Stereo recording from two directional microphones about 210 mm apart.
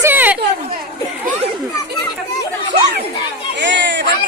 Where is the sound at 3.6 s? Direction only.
60° right (ahead or behind).